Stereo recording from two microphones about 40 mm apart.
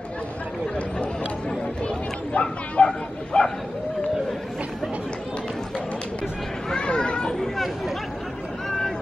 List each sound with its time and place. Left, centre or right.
2.3 s speech: left
2.8 s bow-wow: left
3.3 s bow-wow: centre
6.7 s children playing: left
7.3 s chatter: centre